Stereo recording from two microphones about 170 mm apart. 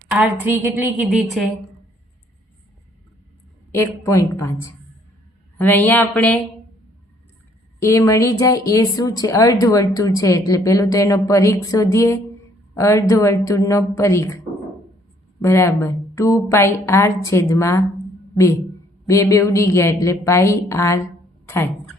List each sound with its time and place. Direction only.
0.2 s a woman's voice: 10° right (ahead or behind)
1.0 s a woman's voice: centre (ahead or behind)
3.7 s a woman's voice: 15° left (ahead or behind)
5.5 s a woman's voice: 10° left (ahead or behind)
7.8 s a woman's voice: 15° left (ahead or behind)
19.0 s a woman's voice: 20° left (ahead or behind)